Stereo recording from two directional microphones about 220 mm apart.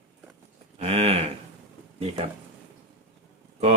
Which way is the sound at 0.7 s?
30° right (ahead or behind).